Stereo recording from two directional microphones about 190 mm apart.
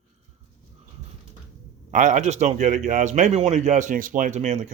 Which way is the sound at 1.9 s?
40° right (ahead or behind).